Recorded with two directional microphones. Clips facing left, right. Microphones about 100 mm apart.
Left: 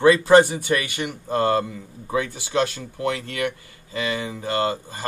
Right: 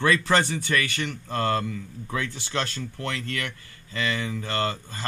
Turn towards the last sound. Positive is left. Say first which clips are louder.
# left 4 dB
turn(degrees=20)  # may be behind; listen again after turning